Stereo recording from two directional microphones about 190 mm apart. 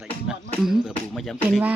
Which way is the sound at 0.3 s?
Centre (ahead or behind).